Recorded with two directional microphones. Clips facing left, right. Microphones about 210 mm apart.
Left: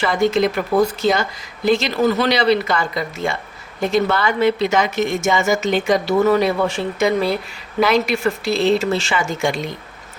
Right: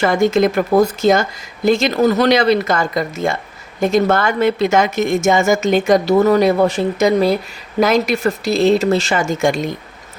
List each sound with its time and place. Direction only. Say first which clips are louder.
0.0 s a woman's voice: right 3 dB; 45° right (ahead or behind)